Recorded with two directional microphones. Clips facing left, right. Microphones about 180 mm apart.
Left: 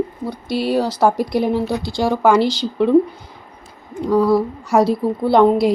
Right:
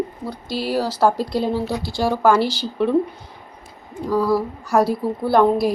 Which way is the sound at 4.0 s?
20° left (ahead or behind).